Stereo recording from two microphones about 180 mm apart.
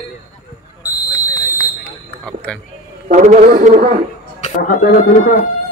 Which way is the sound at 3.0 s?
40° right (ahead or behind).